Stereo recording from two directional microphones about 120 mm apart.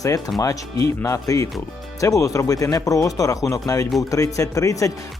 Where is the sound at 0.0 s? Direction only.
30° left (ahead or behind).